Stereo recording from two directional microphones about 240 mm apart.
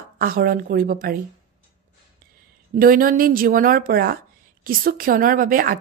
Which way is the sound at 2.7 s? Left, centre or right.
Right.